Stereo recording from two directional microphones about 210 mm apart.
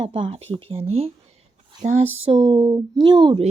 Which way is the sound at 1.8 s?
30° right (ahead or behind).